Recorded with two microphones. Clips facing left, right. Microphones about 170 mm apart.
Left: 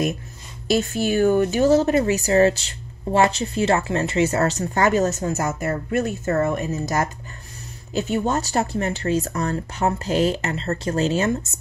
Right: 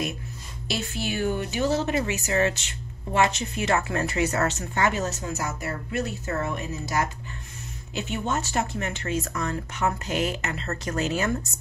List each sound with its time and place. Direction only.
0.7 s speech: 45° left (ahead or behind); by 11.3 s 30° left (ahead or behind)